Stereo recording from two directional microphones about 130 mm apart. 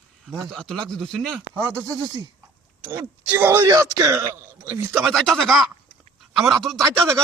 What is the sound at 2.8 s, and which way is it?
Speech, 15° right (ahead or behind).